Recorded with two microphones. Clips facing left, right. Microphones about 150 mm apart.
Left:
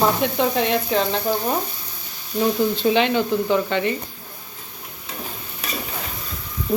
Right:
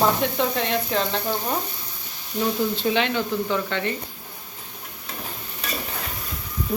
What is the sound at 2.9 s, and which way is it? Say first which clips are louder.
A woman's voice: left 4 dB; 20° left (ahead or behind).